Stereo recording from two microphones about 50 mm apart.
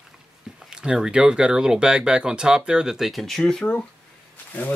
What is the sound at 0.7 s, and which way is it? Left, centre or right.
Speech, centre.